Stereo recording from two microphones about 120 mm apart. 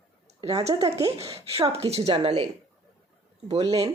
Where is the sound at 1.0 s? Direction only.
55° right (ahead or behind).